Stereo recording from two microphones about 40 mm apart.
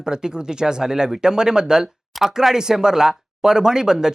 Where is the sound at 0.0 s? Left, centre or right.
Centre.